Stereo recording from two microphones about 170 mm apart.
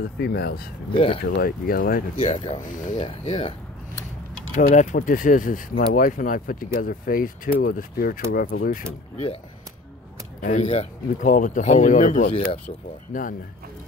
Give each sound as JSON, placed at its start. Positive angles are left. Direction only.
{"t": 0.0, "sound": "speech", "side_deg": 65}
{"t": 0.9, "sound": "speech", "side_deg": 30}
{"t": 1.2, "sound": "speech", "side_deg": 65}
{"t": 2.2, "sound": "speech", "side_deg": 35}
{"t": 2.6, "sound": "speech", "side_deg": 50}
{"t": 3.0, "sound": "speech", "side_deg": 35}
{"t": 4.6, "sound": "speech", "side_deg": 45}
{"t": 10.4, "sound": "speech", "side_deg": 40}
{"t": 11.2, "sound": "speech", "side_deg": 50}